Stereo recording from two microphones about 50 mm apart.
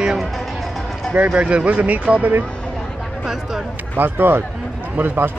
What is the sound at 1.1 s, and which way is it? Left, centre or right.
Speech, right.